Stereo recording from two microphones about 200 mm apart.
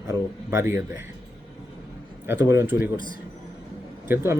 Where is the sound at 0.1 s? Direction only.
15° right (ahead or behind).